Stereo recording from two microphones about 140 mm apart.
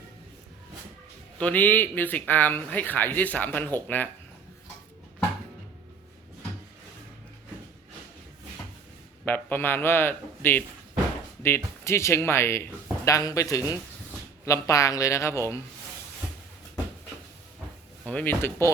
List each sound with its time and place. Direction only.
1.4 s a man's voice: 10° left (ahead or behind)
9.2 s a man's voice: 15° left (ahead or behind)
18.0 s a man's voice: 10° left (ahead or behind)